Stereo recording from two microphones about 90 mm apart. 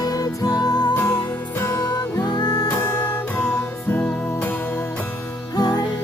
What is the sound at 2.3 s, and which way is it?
Music, 50° left (ahead or behind).